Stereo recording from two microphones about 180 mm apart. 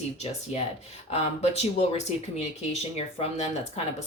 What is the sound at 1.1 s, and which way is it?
A woman's voice, 35° left (ahead or behind).